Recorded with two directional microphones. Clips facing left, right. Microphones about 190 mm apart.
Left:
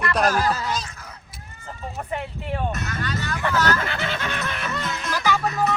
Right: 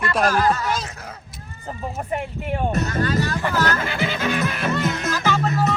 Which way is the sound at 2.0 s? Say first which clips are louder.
Right 2 dB; 15° right (ahead or behind).